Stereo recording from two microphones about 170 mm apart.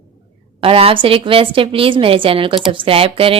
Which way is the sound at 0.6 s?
35° right (ahead or behind).